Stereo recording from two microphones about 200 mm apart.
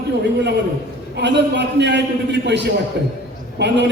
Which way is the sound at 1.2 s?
60° right (ahead or behind).